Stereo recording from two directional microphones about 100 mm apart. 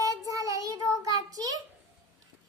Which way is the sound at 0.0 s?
35° right (ahead or behind).